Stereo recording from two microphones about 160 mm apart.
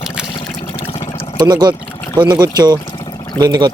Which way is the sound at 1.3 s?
25° right (ahead or behind).